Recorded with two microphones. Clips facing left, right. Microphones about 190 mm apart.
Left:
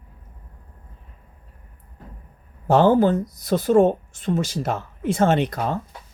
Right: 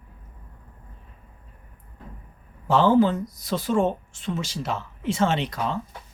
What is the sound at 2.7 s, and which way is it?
Speech, 50° left (ahead or behind).